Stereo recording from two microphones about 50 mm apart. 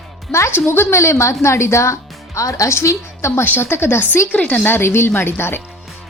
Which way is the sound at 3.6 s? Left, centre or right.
Left.